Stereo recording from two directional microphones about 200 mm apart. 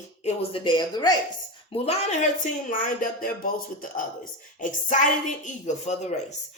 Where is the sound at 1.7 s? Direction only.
30° left (ahead or behind).